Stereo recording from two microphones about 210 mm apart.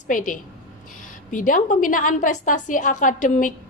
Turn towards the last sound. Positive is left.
turn(degrees=35)  # may be behind; listen again after turning